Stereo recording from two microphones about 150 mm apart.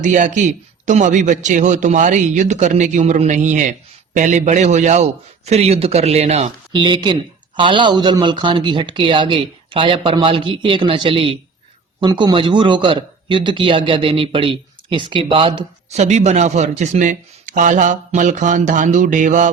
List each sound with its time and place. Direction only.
0.0 s a man's voice: 55° right (ahead or behind)
6.7 s a man's voice: 30° right (ahead or behind); by 19.5 s 55° right (ahead or behind)